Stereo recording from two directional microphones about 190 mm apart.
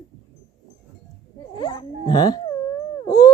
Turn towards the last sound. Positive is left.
turn(degrees=20)  # may be behind; listen again after turning